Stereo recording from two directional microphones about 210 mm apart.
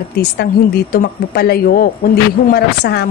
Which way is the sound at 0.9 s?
50° left (ahead or behind).